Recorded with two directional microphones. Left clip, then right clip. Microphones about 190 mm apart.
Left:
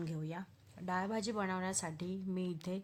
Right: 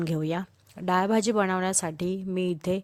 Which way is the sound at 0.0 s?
50° right (ahead or behind).